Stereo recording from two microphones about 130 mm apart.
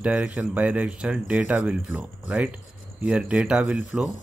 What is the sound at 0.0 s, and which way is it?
Speech, 10° right (ahead or behind).